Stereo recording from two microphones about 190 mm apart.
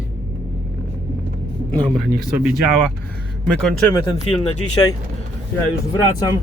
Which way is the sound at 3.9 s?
20° left (ahead or behind).